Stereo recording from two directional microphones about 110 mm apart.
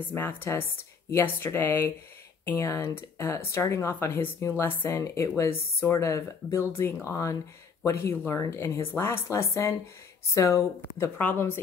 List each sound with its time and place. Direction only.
0.1 s speech: 15° left (ahead or behind)